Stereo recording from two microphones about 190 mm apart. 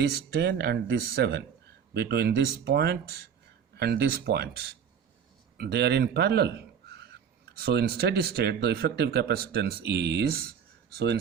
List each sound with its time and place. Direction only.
0.0 s a man's voice: 55° right (ahead or behind)